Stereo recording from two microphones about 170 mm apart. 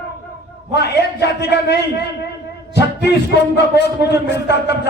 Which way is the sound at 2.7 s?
75° left (ahead or behind).